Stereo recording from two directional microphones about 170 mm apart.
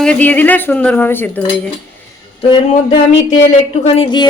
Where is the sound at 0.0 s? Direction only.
10° left (ahead or behind).